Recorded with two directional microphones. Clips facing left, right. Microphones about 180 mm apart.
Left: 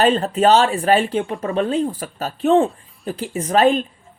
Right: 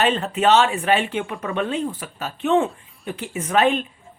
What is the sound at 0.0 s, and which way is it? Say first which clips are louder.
A woman's voice: left 4 dB; 35° left (ahead or behind).